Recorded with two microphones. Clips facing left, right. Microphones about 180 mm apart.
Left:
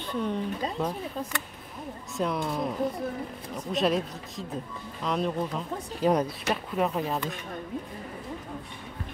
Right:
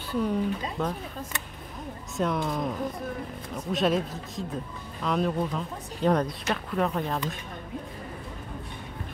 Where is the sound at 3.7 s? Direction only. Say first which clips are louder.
Right 1 dB; centre (ahead or behind).